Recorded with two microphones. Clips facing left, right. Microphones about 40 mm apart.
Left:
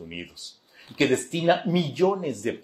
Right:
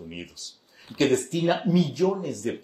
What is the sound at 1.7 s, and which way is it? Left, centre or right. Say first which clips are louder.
Speech: left 1 dB; left.